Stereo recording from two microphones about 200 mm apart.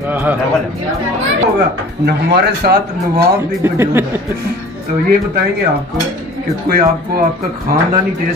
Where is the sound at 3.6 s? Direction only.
10° right (ahead or behind).